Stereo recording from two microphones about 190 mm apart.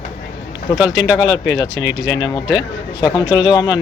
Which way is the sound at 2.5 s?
20° left (ahead or behind).